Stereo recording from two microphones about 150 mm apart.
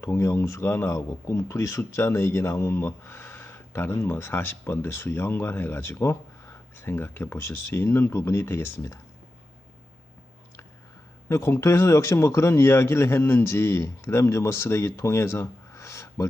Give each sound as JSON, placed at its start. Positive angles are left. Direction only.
{"t": 0.0, "sound": "speech", "side_deg": 20}
{"t": 11.3, "sound": "speech", "side_deg": 15}